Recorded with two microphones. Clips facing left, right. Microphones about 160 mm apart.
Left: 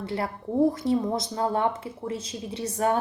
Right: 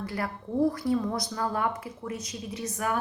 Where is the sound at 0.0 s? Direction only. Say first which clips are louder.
Left 3 dB; 25° left (ahead or behind).